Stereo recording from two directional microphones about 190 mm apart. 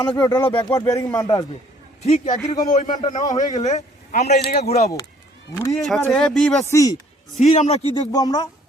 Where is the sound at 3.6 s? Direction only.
35° left (ahead or behind).